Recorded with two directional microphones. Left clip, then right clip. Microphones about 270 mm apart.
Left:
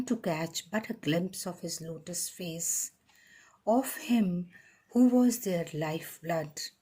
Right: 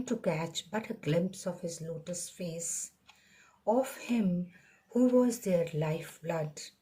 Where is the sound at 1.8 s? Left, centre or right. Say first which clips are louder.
Even; left.